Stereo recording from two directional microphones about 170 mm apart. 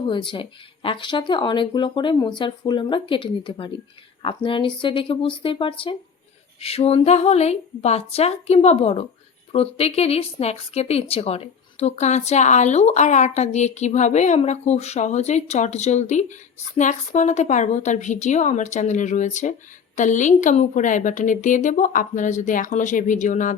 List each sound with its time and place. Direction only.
0.0 s a woman's voice: 30° left (ahead or behind); by 23.6 s 45° left (ahead or behind)